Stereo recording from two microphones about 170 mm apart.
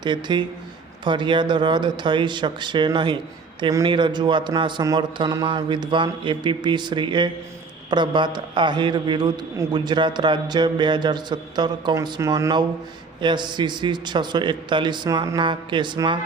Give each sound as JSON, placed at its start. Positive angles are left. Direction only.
{"t": 0.0, "sound": "a man's voice", "side_deg": -25}